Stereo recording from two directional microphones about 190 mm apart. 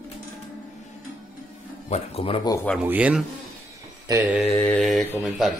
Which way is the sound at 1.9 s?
30° left (ahead or behind).